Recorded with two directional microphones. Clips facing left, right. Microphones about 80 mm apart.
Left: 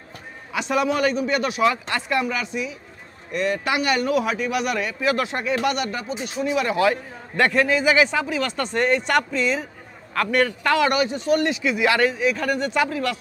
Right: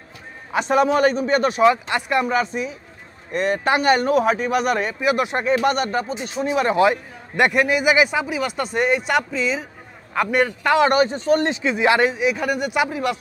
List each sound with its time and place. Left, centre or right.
0.5 s a man's voice: right
1.6 s speech: right
2.2 s a man's voice: right
5.0 s speech: centre
5.4 s a man's voice: right
6.8 s a man's voice: centre
10.1 s a man's voice: centre
10.9 s speech: right; by 13.2 s centre